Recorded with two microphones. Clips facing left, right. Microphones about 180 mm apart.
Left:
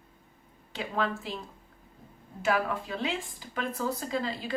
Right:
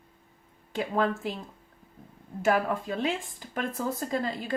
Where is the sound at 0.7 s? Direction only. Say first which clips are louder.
Right 4 dB; 50° right (ahead or behind).